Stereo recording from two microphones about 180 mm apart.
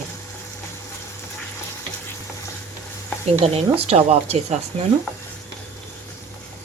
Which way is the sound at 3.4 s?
35° right (ahead or behind).